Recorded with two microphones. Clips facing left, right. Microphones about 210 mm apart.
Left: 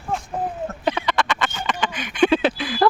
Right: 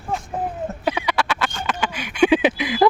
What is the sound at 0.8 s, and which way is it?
Duck, 10° right (ahead or behind).